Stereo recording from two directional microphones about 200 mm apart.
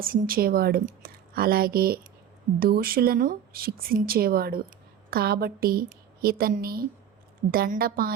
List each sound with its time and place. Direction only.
0.0 s speech: 45° right (ahead or behind)